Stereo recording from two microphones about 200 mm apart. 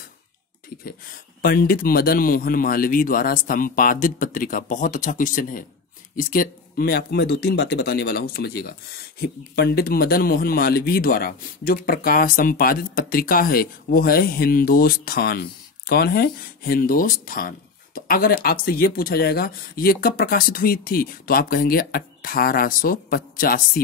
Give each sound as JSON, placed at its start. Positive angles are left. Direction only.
{"t": 1.4, "sound": "speech", "side_deg": 45}